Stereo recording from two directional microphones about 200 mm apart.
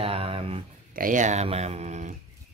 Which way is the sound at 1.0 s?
40° right (ahead or behind).